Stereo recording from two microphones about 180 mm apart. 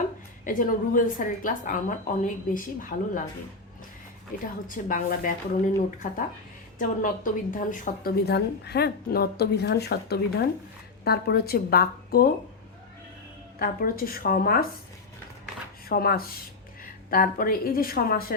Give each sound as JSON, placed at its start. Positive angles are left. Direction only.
{"t": 0.4, "sound": "a woman's voice", "side_deg": 50}
{"t": 4.6, "sound": "a woman's voice", "side_deg": 50}
{"t": 13.6, "sound": "speech", "side_deg": 55}
{"t": 15.9, "sound": "a woman's voice", "side_deg": 55}